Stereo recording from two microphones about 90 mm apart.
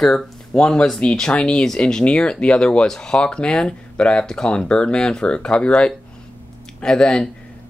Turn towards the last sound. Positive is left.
turn(degrees=5)  # may be behind; listen again after turning